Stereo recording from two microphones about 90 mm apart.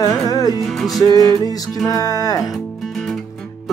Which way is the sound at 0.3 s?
45° left (ahead or behind).